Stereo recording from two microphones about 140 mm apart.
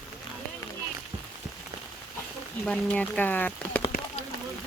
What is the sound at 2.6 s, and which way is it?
Speech, 5° left (ahead or behind).